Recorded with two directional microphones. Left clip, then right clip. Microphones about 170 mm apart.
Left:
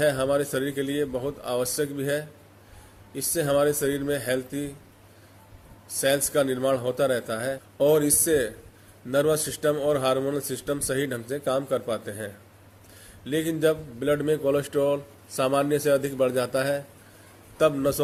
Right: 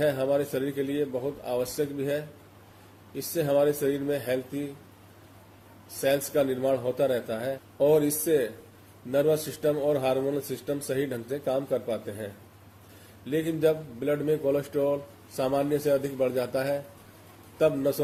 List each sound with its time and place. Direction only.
0.0 s a man's voice: 50° left (ahead or behind)
6.0 s a man's voice: 50° left (ahead or behind)